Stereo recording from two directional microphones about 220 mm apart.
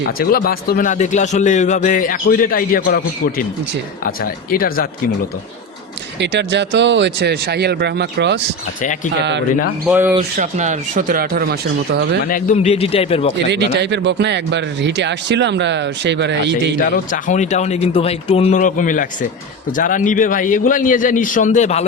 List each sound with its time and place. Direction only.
0.2 s a man's voice: 40° left (ahead or behind)
6.1 s speech: 50° right (ahead or behind)
9.8 s speech: 10° right (ahead or behind)
10.3 s speech: 35° right (ahead or behind)
12.3 s a man's voice: 35° left (ahead or behind)
13.5 s speech: 50° right (ahead or behind)
16.9 s a man's voice: 35° left (ahead or behind)